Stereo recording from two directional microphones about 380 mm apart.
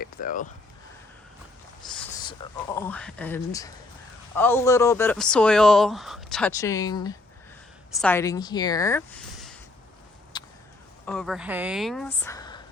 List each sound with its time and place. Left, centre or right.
0.0 s speech: left
2.7 s a man's voice: centre
10.3 s a sound: centre
11.0 s a man's voice: centre